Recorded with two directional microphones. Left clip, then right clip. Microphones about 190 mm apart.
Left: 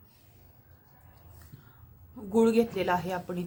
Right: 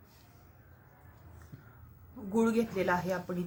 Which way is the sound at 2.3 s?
20° left (ahead or behind).